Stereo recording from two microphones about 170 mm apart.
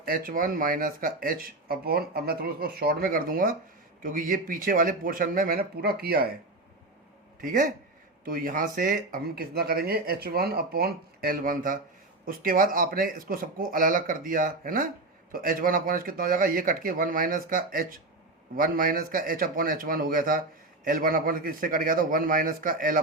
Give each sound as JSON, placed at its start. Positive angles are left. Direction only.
{"t": 0.0, "sound": "speech", "side_deg": -55}
{"t": 7.4, "sound": "speech", "side_deg": -55}